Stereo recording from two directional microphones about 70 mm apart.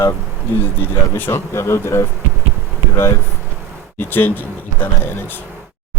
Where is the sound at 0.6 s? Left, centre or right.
Left.